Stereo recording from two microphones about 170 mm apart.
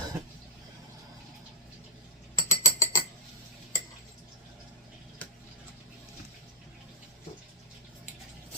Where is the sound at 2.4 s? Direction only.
20° left (ahead or behind).